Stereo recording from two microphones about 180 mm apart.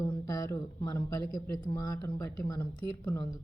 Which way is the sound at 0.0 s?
20° left (ahead or behind).